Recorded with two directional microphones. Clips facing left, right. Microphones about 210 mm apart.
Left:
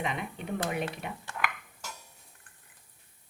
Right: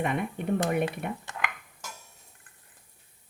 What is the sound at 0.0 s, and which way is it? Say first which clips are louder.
Speech: right 6 dB; 55° right (ahead or behind).